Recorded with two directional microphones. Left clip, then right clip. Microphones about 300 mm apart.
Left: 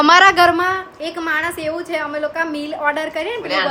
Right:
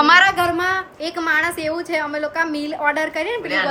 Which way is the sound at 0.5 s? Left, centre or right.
Centre.